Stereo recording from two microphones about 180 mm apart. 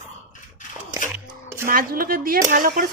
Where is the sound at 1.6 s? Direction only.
55° right (ahead or behind).